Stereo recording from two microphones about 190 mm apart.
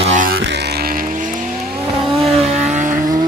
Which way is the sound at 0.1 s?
45° right (ahead or behind).